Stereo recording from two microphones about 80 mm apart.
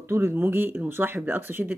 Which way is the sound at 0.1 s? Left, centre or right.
Right.